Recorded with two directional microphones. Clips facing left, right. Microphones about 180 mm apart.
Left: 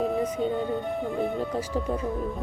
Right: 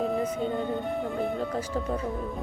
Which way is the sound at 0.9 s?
Centre (ahead or behind).